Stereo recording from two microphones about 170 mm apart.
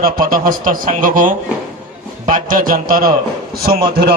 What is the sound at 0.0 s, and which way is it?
A man's voice, 60° right (ahead or behind).